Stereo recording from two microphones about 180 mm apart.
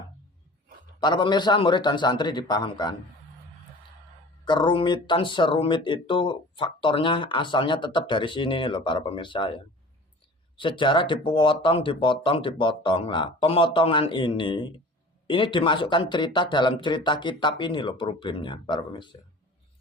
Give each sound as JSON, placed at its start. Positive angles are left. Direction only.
{"t": 0.9, "sound": "speech", "side_deg": 25}
{"t": 4.4, "sound": "speech", "side_deg": 25}
{"t": 10.6, "sound": "speech", "side_deg": 25}